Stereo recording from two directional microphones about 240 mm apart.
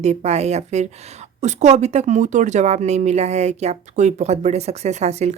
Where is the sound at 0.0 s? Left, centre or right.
Right.